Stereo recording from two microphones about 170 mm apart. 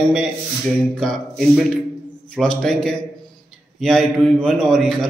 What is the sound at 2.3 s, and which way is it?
A man's voice, 5° left (ahead or behind).